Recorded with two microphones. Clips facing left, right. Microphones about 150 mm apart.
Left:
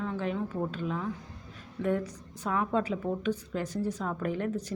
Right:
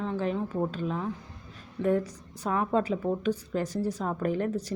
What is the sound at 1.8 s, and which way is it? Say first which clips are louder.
Speech: right 3 dB; 25° right (ahead or behind).